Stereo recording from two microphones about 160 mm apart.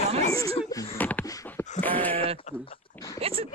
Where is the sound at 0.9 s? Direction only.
10° left (ahead or behind).